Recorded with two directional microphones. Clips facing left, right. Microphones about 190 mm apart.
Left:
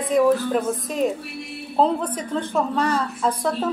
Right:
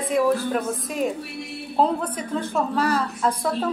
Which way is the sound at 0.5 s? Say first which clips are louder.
Left 2 dB; 5° right (ahead or behind).